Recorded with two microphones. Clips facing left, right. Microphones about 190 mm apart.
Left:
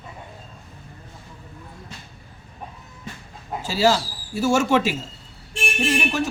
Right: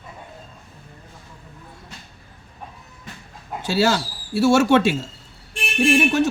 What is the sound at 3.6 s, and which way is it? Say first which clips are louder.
Speech: even; 70° right (ahead or behind).